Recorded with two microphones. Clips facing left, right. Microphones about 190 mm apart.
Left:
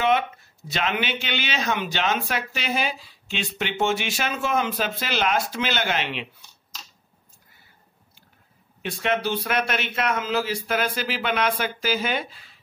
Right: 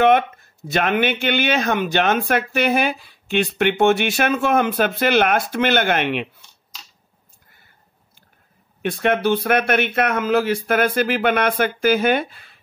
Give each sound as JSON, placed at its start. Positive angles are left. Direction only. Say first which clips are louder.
{"t": 0.0, "sound": "speech", "louder": "right 7 dB", "side_deg": -55}
{"t": 8.8, "sound": "speech", "louder": "right 6 dB", "side_deg": -55}